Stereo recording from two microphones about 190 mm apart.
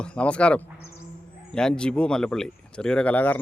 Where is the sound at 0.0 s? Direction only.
5° left (ahead or behind).